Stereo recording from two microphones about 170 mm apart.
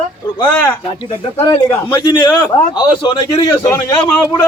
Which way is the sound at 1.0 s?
30° left (ahead or behind).